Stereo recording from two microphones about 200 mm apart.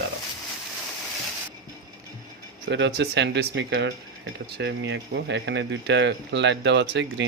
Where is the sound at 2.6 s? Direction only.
60° right (ahead or behind).